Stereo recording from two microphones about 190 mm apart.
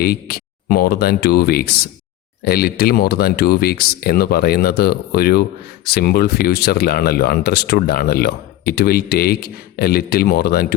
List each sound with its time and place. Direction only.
0.0 s speech: 55° left (ahead or behind)